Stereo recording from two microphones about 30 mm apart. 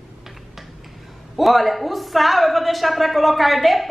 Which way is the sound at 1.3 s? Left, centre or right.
Centre.